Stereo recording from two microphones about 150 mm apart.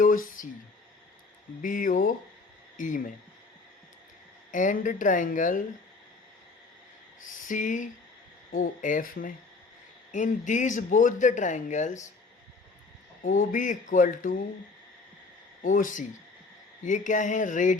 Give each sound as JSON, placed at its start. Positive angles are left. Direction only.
{"t": 0.0, "sound": "a sound", "side_deg": 65}
{"t": 1.6, "sound": "speech", "side_deg": 65}
{"t": 4.5, "sound": "speech", "side_deg": 60}
{"t": 7.2, "sound": "a sound", "side_deg": 60}
{"t": 8.5, "sound": "speech", "side_deg": 60}
{"t": 13.2, "sound": "speech", "side_deg": 60}
{"t": 15.6, "sound": "speech", "side_deg": 60}